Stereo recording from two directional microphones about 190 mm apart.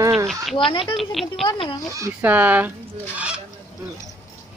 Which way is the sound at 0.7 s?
25° left (ahead or behind).